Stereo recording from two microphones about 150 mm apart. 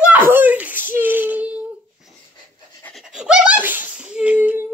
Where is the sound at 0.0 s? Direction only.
15° right (ahead or behind).